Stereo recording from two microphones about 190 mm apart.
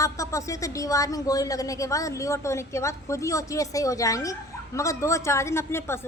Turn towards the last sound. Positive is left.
turn(degrees=15)  # may be behind; listen again after turning